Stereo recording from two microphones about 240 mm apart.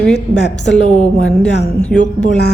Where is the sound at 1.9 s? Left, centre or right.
Centre.